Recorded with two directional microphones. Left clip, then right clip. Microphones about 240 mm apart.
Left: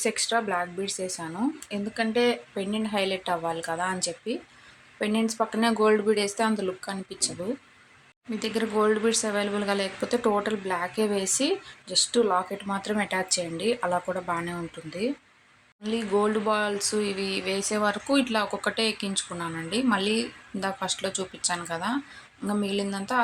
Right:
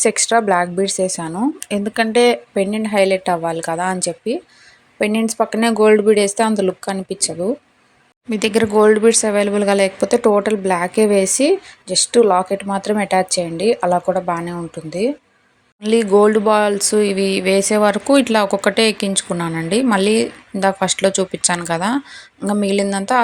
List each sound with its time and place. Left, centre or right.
0.0 s speech: right